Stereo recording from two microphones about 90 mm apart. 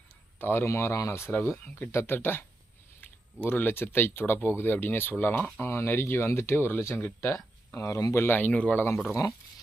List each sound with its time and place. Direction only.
0.3 s speech: 25° left (ahead or behind)
3.4 s speech: 20° left (ahead or behind)
7.7 s speech: 35° left (ahead or behind); by 8.8 s 15° left (ahead or behind)